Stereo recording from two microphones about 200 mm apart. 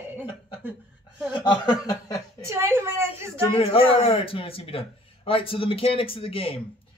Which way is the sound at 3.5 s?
30° left (ahead or behind).